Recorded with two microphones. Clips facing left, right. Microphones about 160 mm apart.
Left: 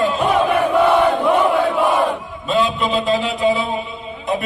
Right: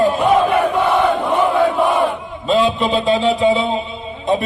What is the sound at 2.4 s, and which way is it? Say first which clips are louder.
A man's voice: right 3 dB; 30° right (ahead or behind).